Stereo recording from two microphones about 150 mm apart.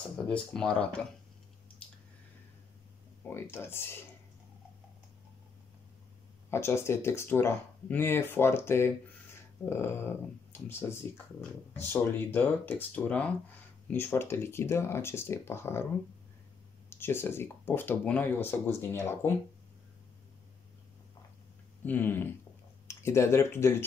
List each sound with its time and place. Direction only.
0.3 s speech: 5° left (ahead or behind)
3.3 s speech: 15° left (ahead or behind)
6.5 s speech: 15° left (ahead or behind)
16.9 s speech: 15° left (ahead or behind)
21.8 s speech: 10° left (ahead or behind)